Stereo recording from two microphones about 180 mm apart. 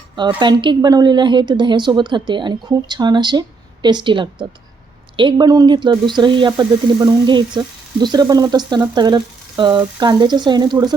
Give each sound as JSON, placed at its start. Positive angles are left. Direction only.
{"t": 0.2, "sound": "a woman's voice", "side_deg": -25}